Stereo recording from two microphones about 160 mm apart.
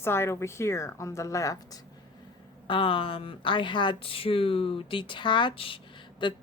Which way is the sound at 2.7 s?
35° left (ahead or behind).